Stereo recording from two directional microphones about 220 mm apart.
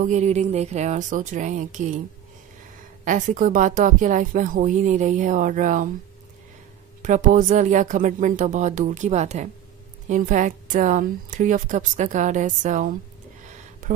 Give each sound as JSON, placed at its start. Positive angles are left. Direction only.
{"t": 0.0, "sound": "a woman's voice", "side_deg": -30}
{"t": 3.1, "sound": "a woman's voice", "side_deg": -35}
{"t": 7.0, "sound": "a woman's voice", "side_deg": -35}